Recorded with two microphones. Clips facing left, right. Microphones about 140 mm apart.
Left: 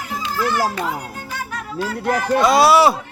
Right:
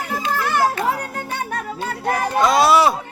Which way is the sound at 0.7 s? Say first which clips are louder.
Right 3 dB; 55° right (ahead or behind).